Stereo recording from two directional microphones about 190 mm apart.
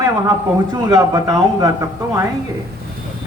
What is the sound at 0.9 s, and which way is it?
Speech, 15° right (ahead or behind).